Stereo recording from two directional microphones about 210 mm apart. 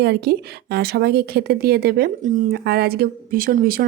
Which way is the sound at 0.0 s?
50° right (ahead or behind).